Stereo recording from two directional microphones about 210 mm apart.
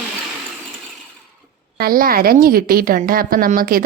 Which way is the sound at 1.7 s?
45° right (ahead or behind).